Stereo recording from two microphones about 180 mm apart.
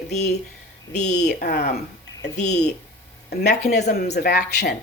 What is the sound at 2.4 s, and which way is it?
Speech, 40° left (ahead or behind).